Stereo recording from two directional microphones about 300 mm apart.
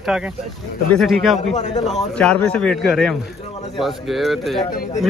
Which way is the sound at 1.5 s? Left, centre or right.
Left.